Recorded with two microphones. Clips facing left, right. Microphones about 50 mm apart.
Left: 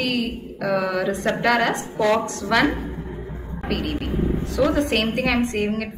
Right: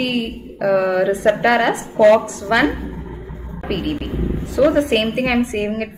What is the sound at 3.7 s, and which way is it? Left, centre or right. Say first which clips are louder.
Speech: right 3 dB; centre.